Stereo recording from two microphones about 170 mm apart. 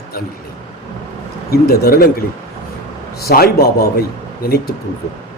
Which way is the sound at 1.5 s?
65° left (ahead or behind).